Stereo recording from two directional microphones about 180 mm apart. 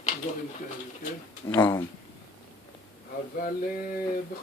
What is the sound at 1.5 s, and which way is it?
Speech, 15° left (ahead or behind).